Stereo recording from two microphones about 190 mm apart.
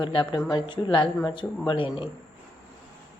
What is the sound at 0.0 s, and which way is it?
Speech, 25° left (ahead or behind).